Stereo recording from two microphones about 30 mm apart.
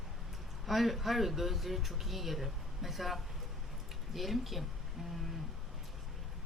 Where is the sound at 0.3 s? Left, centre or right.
Centre.